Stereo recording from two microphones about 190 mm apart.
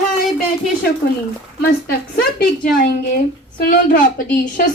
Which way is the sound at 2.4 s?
50° left (ahead or behind).